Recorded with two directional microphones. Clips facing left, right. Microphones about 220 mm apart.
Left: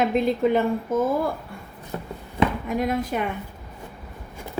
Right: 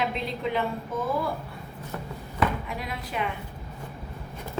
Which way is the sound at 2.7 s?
45° left (ahead or behind).